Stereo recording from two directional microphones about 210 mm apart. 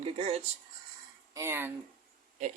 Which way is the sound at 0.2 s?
30° right (ahead or behind).